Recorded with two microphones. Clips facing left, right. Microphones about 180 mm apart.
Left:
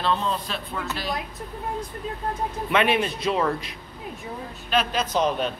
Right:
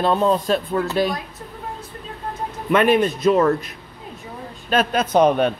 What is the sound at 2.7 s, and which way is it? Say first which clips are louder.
Speech: right 7 dB; 45° right (ahead or behind).